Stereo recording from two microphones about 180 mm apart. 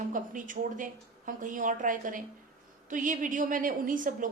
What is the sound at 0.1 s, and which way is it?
A woman's voice, 45° right (ahead or behind).